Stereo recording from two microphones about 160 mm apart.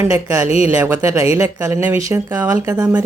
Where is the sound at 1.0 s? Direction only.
20° right (ahead or behind).